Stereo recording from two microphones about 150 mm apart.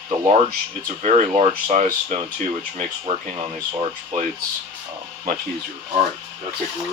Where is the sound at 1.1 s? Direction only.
45° right (ahead or behind).